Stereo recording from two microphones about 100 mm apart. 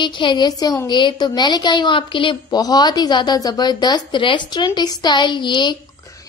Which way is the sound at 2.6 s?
40° left (ahead or behind).